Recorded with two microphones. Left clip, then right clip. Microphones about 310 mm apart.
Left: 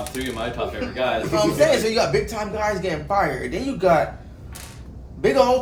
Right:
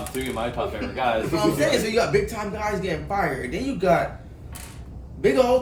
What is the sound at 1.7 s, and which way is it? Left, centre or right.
A man's voice, centre.